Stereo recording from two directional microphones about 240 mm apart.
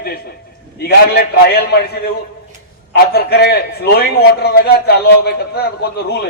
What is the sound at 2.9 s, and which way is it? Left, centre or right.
A man's voice, left.